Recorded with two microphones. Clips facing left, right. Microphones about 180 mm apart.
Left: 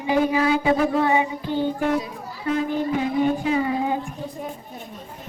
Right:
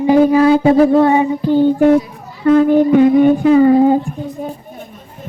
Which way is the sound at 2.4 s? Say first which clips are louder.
Right 13 dB; 55° right (ahead or behind).